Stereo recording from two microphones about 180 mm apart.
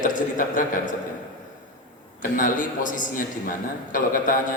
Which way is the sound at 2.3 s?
45° left (ahead or behind).